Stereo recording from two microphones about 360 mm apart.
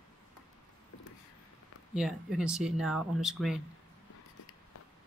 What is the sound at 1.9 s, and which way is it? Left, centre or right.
Speech, centre.